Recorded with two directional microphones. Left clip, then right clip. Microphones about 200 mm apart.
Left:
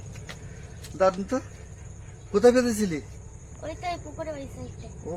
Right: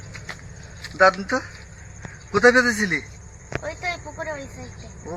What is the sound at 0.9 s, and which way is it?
A man's voice, 15° left (ahead or behind).